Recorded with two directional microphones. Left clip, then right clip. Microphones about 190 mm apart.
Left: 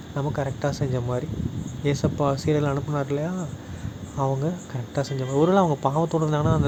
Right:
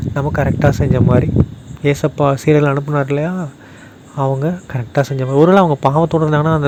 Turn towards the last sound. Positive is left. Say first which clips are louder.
# right 9 dB
turn(degrees=-35)  # may be behind; listen again after turning